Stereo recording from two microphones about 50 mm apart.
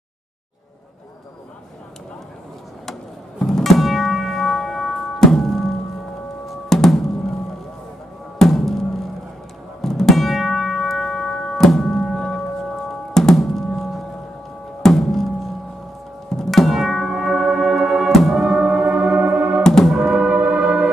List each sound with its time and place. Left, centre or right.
2.9 s music: centre
8.4 s music: centre
9.8 s music: centre
16.3 s music: centre
18.1 s music: centre
18.4 s gong: centre
19.6 s music: centre
20.0 s music: right